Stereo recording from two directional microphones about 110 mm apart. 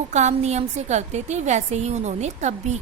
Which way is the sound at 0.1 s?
90° right.